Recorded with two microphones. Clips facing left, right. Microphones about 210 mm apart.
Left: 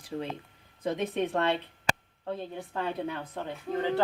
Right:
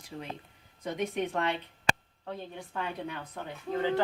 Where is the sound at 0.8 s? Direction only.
30° left (ahead or behind).